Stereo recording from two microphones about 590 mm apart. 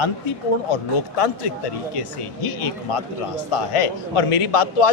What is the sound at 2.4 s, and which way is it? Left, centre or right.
A man's voice, left.